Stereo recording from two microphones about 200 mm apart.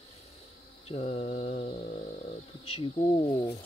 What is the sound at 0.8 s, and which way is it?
Mantra, 30° left (ahead or behind).